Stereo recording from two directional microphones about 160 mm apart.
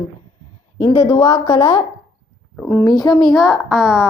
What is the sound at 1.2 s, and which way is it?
Speech, 35° left (ahead or behind).